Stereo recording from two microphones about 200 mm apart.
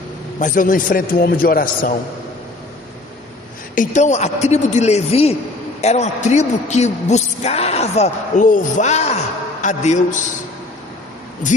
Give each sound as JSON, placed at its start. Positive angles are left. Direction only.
{"t": 0.3, "sound": "a man's voice", "side_deg": 40}
{"t": 3.8, "sound": "a man's voice", "side_deg": 35}